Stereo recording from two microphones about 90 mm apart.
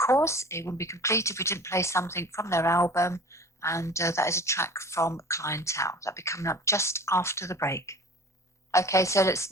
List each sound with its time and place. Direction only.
0.0 s speech: 30° left (ahead or behind)